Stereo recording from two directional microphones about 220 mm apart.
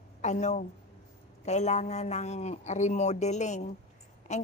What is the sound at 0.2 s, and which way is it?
A woman's voice, 30° left (ahead or behind).